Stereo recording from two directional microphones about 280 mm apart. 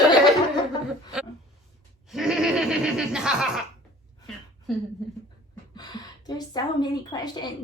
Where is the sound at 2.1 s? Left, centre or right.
Centre.